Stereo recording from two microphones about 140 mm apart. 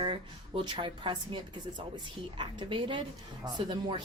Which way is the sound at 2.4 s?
35° right (ahead or behind).